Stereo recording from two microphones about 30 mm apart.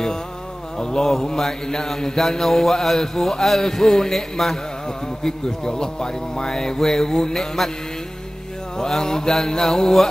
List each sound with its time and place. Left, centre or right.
0.7 s a sound: left
1.3 s mantra: centre
5.2 s speech: left
6.8 s mantra: centre
7.3 s mantra: centre
8.7 s mantra: centre